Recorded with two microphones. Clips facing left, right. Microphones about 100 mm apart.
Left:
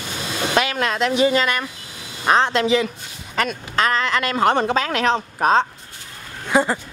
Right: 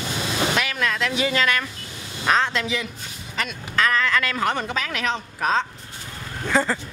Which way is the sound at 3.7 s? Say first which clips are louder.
Left 1 dB; 25° left (ahead or behind).